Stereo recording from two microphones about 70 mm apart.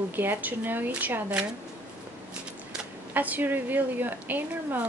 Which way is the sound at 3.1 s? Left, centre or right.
Right.